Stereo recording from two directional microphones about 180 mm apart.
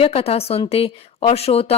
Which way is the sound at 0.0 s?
35° left (ahead or behind).